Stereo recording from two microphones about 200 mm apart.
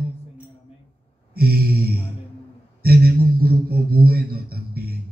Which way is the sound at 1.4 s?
50° right (ahead or behind).